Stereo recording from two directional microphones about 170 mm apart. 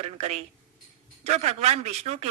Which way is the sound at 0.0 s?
40° right (ahead or behind).